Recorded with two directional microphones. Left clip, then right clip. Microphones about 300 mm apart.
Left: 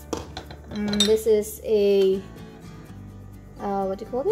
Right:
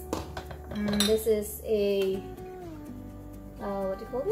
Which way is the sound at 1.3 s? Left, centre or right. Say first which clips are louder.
Left 6 dB; left.